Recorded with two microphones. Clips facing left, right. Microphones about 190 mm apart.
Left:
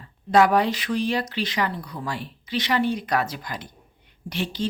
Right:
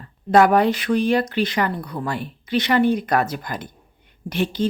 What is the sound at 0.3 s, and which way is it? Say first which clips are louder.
Speech: right 3 dB; 50° right (ahead or behind).